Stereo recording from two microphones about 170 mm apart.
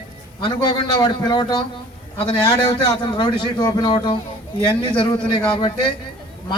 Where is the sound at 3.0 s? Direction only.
30° left (ahead or behind).